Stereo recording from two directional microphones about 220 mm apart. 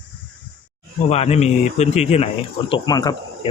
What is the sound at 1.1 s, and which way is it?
A man's voice, 30° left (ahead or behind).